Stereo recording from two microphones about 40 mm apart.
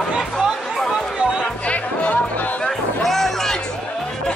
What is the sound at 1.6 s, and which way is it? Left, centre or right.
Music, left.